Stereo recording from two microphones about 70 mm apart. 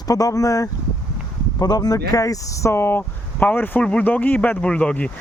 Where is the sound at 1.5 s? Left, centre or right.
Left.